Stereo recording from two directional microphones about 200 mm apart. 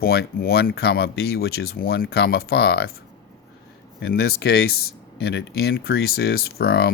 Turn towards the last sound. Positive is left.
turn(degrees=50)  # may be behind; listen again after turning